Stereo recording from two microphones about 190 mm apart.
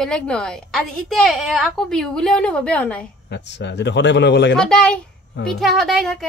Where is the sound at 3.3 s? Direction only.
65° left (ahead or behind).